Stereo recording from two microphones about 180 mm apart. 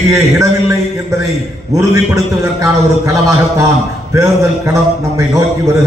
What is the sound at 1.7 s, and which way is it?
A man's voice, 15° right (ahead or behind).